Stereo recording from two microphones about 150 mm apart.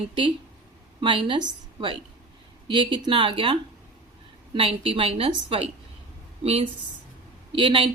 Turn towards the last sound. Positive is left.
turn(degrees=-35)  # may be behind; listen again after turning